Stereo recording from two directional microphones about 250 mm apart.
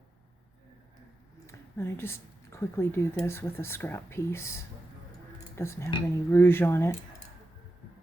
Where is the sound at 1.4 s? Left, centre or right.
Centre.